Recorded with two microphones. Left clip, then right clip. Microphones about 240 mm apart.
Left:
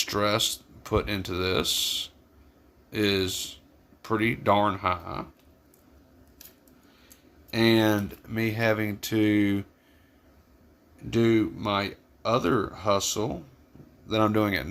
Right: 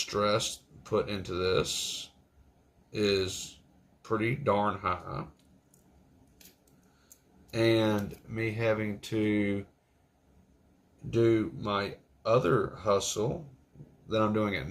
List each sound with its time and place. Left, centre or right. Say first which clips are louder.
0.0 s speech: left 3 dB; left
2.9 s speech: left 3 dB; left
7.5 s speech: left 4 dB; left
11.1 s speech: left 3 dB; left